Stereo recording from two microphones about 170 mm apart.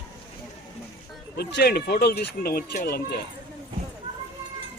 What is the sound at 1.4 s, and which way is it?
Speech, 75° left (ahead or behind).